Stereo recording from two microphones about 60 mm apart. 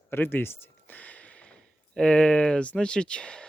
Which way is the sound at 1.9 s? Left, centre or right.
Centre.